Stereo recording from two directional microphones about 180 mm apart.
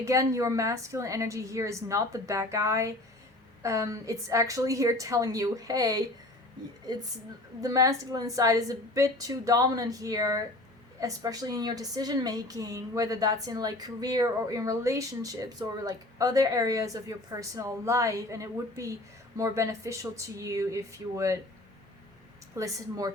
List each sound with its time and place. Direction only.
0.0 s a woman's voice: 15° right (ahead or behind)
7.6 s a woman's voice: 20° right (ahead or behind)
22.5 s a woman's voice: 20° right (ahead or behind)